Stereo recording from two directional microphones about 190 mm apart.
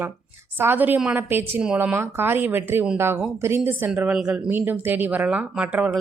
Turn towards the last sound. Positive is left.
turn(degrees=-5)  # may be behind; listen again after turning